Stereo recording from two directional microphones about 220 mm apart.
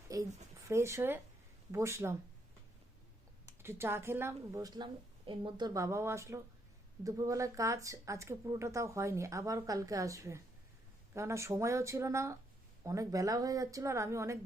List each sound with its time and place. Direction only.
0.1 s a sound: 15° right (ahead or behind)
0.7 s speech: 10° right (ahead or behind)
3.4 s speech: 10° right (ahead or behind)